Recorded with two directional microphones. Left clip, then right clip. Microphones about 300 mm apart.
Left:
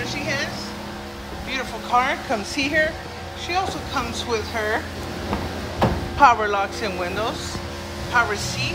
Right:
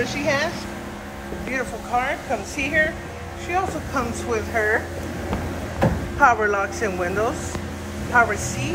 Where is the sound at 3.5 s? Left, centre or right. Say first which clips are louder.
Even; centre.